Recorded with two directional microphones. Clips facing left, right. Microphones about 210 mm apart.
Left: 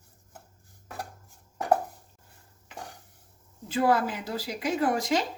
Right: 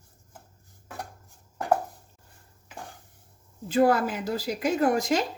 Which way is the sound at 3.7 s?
45° right (ahead or behind).